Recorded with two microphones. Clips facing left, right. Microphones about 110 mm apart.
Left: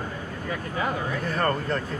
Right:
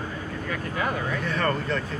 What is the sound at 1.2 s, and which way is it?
Speech, 40° left (ahead or behind).